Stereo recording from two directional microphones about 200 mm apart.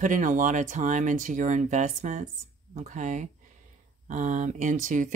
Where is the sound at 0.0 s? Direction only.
40° right (ahead or behind).